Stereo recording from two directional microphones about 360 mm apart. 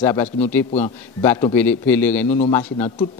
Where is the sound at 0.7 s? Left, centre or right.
Centre.